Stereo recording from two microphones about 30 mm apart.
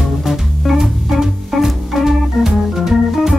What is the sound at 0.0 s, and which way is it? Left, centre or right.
Music, centre.